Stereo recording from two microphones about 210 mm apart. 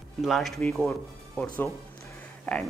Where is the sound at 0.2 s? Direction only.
Centre (ahead or behind).